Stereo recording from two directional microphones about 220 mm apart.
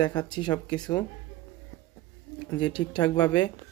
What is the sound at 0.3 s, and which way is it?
Speech, 20° left (ahead or behind).